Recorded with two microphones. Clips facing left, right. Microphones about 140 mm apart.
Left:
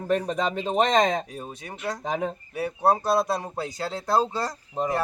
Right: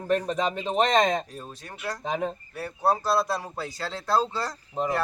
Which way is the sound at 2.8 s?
20° left (ahead or behind).